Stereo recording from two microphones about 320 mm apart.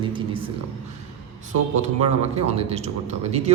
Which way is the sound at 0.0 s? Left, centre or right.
Centre.